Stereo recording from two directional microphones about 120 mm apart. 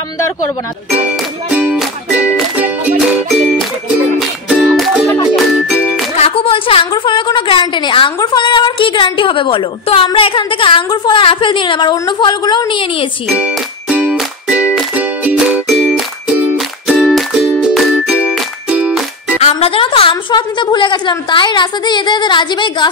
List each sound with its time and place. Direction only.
1.5 s music: 10° right (ahead or behind)
4.2 s music: centre (ahead or behind)
5.7 s music: 10° right (ahead or behind)
6.1 s a woman's voice: 55° left (ahead or behind)
13.3 s music: 10° right (ahead or behind)
19.4 s a woman's voice: 50° left (ahead or behind)